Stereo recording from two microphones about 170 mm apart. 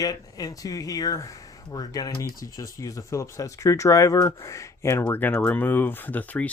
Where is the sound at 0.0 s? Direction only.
20° left (ahead or behind).